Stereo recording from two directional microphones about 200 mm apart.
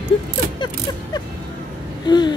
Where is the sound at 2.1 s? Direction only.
20° left (ahead or behind).